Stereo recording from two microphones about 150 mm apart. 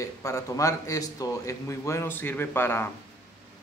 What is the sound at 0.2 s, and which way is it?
A man's voice, 20° left (ahead or behind).